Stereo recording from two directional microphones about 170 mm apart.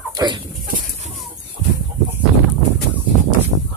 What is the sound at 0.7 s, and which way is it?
Bird, 55° right (ahead or behind).